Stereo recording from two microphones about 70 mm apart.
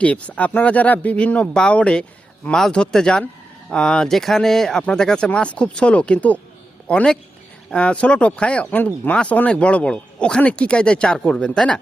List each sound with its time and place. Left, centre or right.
0.0 s a man's voice: centre